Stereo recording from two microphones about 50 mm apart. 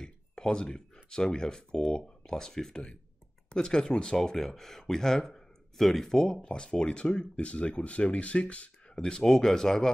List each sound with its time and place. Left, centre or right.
0.0 s speech: centre
8.9 s speech: centre